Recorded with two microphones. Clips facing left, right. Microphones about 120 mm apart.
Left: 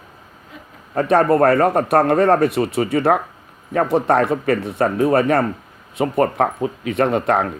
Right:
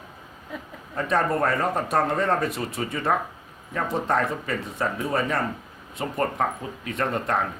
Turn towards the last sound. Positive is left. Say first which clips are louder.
# left 8 dB
turn(degrees=85)